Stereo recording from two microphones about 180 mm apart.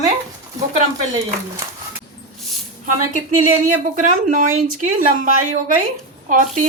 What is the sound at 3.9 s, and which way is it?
A woman's voice, 45° right (ahead or behind).